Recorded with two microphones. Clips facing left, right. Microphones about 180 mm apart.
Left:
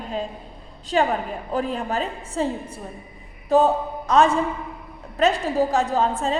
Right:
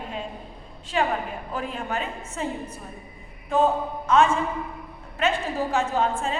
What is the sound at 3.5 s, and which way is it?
A woman's voice, 35° left (ahead or behind).